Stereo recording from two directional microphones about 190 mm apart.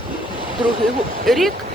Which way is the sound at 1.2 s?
Centre (ahead or behind).